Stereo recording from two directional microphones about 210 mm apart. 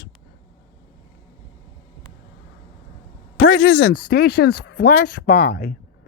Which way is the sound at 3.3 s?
55° left (ahead or behind).